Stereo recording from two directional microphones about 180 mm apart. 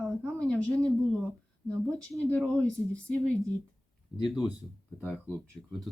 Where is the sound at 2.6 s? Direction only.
5° left (ahead or behind).